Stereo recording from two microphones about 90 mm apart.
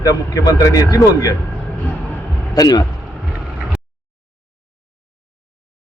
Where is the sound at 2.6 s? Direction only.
50° left (ahead or behind).